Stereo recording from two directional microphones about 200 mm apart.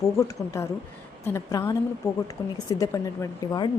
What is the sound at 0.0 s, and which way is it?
A woman's voice, 15° left (ahead or behind).